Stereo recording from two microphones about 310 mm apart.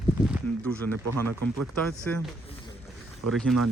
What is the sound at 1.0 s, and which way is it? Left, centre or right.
Speech, right.